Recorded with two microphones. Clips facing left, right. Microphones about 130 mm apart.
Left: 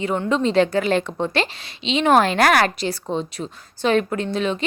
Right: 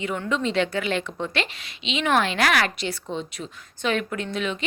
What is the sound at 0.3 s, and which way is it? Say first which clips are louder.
A woman's voice: left 6 dB; 35° left (ahead or behind).